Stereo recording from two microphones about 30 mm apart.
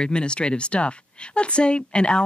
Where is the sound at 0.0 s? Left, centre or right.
Left.